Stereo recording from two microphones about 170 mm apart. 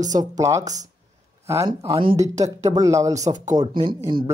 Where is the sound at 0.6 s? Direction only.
45° right (ahead or behind).